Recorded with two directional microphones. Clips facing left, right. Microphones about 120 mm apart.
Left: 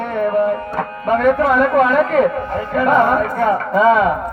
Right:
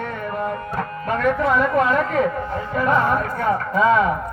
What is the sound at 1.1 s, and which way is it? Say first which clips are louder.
A man's voice: left 6 dB; 60° left (ahead or behind).